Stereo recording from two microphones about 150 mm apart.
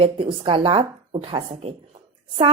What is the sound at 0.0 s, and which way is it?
Speech, 35° right (ahead or behind).